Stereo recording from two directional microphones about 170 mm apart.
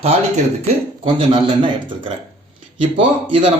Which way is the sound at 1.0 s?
30° right (ahead or behind).